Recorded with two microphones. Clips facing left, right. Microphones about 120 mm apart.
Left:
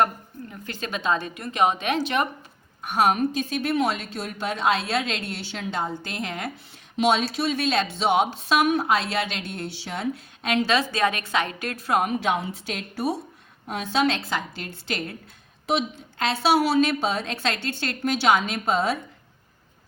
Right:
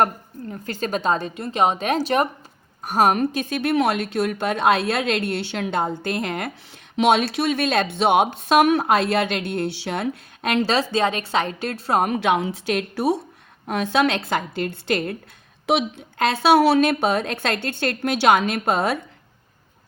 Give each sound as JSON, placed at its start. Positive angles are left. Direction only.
{"t": 0.5, "sound": "a woman's voice", "side_deg": -40}
{"t": 3.2, "sound": "a woman's voice", "side_deg": -65}
{"t": 10.7, "sound": "a woman's voice", "side_deg": -30}
{"t": 12.0, "sound": "a woman's voice", "side_deg": -70}
{"t": 13.7, "sound": "a woman's voice", "side_deg": -60}
{"t": 15.6, "sound": "a woman's voice", "side_deg": -70}